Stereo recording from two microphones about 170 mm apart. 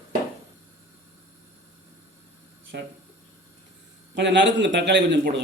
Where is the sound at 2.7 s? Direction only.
75° right (ahead or behind).